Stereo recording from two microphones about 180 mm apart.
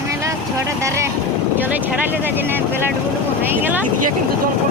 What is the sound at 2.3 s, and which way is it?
Speech, 10° right (ahead or behind).